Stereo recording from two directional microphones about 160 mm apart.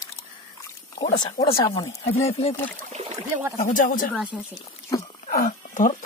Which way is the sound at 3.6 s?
55° left (ahead or behind).